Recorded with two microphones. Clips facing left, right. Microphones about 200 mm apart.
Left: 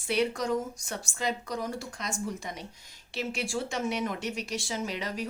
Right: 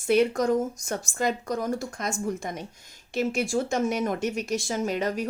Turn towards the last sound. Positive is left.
turn(degrees=-50)  # may be behind; listen again after turning